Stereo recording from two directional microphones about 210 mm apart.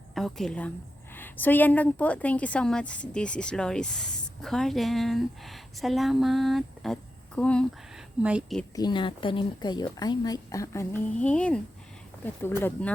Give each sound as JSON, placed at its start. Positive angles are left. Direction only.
{"t": 0.1, "sound": "a woman's voice", "side_deg": 0}
{"t": 8.7, "sound": "speech", "side_deg": 20}